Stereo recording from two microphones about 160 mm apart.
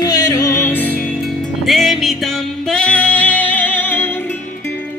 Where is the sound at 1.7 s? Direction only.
Centre (ahead or behind).